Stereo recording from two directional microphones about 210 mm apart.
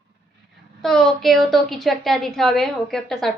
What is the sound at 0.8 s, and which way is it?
A woman's voice, centre (ahead or behind).